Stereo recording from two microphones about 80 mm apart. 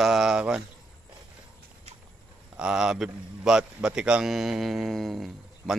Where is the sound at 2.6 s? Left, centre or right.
Centre.